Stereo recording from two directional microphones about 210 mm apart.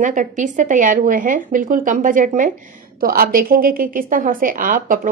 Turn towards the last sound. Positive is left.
turn(degrees=-40)  # may be behind; listen again after turning